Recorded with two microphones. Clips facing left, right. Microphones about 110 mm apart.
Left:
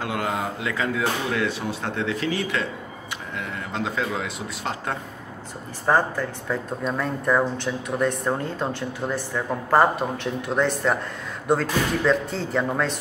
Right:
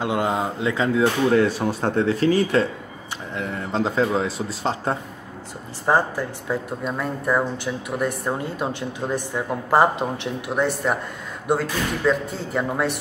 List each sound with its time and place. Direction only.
0.0 s speech: 25° right (ahead or behind)
5.9 s speech: 15° right (ahead or behind)